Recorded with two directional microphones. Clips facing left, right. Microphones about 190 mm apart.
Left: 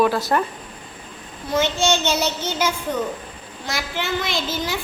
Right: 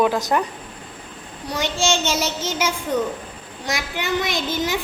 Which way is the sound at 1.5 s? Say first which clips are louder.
Left 3 dB; 15° right (ahead or behind).